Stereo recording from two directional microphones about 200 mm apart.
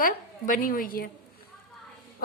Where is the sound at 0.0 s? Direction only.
45° left (ahead or behind).